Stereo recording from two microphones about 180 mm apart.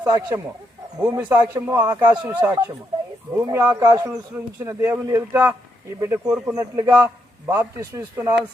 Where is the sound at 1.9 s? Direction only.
25° right (ahead or behind).